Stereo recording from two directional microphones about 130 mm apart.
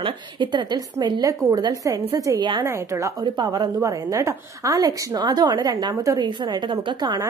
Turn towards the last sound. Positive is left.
turn(degrees=-35)  # may be behind; listen again after turning